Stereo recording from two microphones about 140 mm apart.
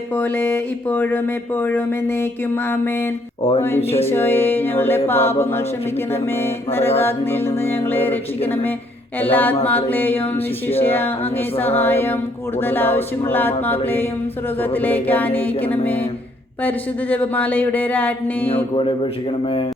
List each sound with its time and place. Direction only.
0.2 s speech: 15° left (ahead or behind)
3.9 s speech: 15° left (ahead or behind)
6.7 s speech: 15° left (ahead or behind)
9.2 s speech: 10° left (ahead or behind)
18.4 s speech: 40° left (ahead or behind)